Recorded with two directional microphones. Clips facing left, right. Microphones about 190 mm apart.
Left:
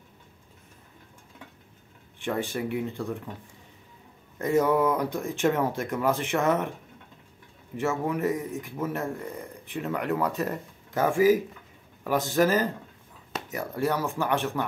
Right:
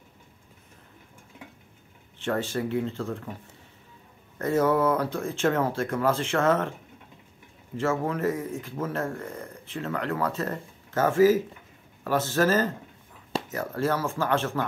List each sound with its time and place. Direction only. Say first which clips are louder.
2.1 s speech: right 1 dB; 15° left (ahead or behind)
4.4 s speech: even; 15° left (ahead or behind)
7.7 s speech: right 1 dB; 15° left (ahead or behind)